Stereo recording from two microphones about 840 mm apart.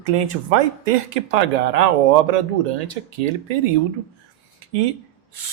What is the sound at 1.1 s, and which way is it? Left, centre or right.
Speech, right.